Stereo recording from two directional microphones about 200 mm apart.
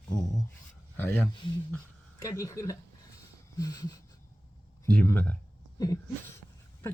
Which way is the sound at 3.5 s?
20° left (ahead or behind).